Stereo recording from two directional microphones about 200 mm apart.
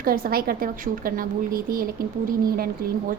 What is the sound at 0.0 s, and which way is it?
A woman's voice, 45° right (ahead or behind).